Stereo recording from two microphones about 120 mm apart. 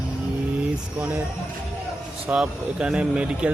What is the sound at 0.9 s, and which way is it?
Speech, 15° right (ahead or behind).